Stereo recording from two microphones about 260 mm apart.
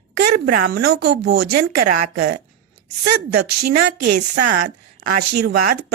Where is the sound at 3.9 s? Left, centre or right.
Right.